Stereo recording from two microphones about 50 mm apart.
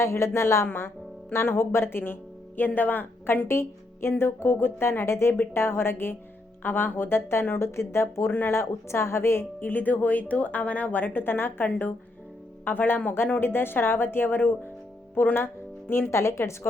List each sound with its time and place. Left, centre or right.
0.0 s speech: left
2.6 s a woman's voice: left
3.4 s speech: left
5.5 s speech: left
7.6 s speech: left
8.3 s speech: left
8.5 s a woman's voice: left
16.0 s speech: left